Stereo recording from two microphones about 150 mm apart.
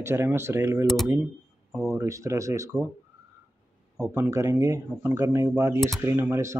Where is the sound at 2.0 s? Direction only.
20° right (ahead or behind).